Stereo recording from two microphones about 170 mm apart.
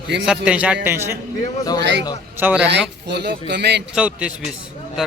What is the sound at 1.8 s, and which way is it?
Speech, 90° right.